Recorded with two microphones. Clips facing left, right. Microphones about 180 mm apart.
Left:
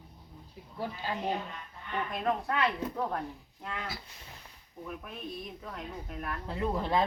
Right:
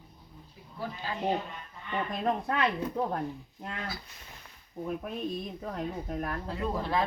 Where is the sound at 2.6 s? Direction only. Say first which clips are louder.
Right 2 dB; 20° right (ahead or behind).